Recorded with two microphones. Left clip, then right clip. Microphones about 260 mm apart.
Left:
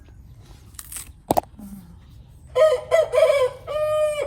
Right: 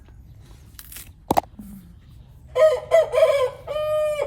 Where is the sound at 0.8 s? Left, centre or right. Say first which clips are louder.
Left 4 dB; centre.